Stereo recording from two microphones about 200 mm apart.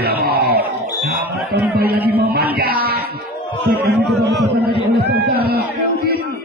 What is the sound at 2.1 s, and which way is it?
Speech, 50° right (ahead or behind).